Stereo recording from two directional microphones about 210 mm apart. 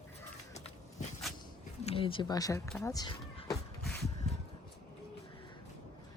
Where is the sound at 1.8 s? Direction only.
25° left (ahead or behind).